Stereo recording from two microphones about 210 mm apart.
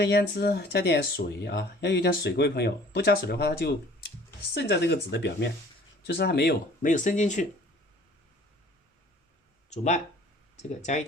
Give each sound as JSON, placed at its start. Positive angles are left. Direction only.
{"t": 0.0, "sound": "speech", "side_deg": 55}
{"t": 6.8, "sound": "speech", "side_deg": 40}
{"t": 9.6, "sound": "speech", "side_deg": 35}